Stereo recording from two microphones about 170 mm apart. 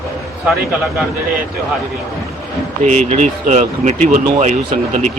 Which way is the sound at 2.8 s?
45° right (ahead or behind).